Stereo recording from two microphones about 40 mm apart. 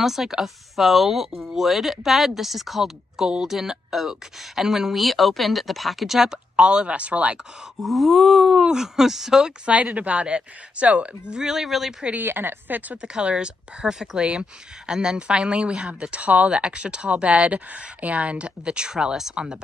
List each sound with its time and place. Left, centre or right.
0.0 s a woman's voice: centre
6.5 s speech: right
7.8 s a woman's voice: centre
9.7 s speech: right
11.3 s a woman's voice: centre
12.2 s speech: right
12.9 s speech: right